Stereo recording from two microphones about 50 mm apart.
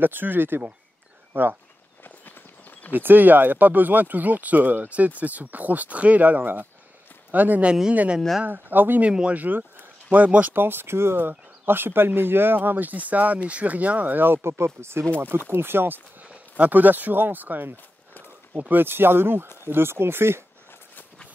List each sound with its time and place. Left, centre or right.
0.0 s speech: right
2.9 s speech: right
10.5 s speech: right
11.1 s speech: right
15.1 s speech: right
16.3 s speech: right